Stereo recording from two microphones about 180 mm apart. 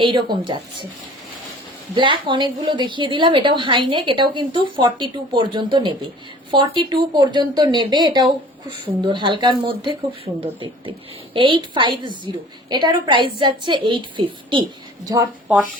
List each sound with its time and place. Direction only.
0.0 s a woman's voice: 25° right (ahead or behind)
2.0 s a woman's voice: 25° right (ahead or behind)